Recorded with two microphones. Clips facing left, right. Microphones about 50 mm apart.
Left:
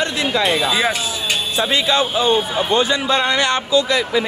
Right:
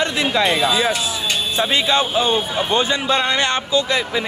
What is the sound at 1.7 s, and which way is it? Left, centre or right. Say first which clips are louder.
Speech: even; right.